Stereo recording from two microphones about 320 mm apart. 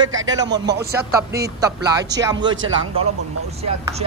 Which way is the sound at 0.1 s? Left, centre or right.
Right.